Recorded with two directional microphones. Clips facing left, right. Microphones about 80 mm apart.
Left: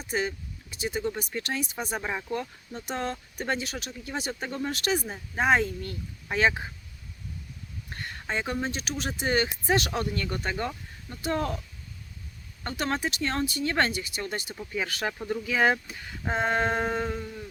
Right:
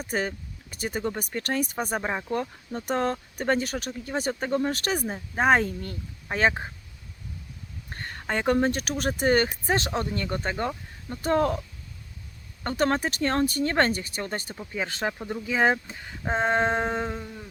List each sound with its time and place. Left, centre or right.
0.1 s speech: right
2.0 s speech: right
2.3 s speech: right
7.9 s a sound: right
8.3 s speech: right
9.8 s speech: right
12.6 s speech: right
14.5 s speech: centre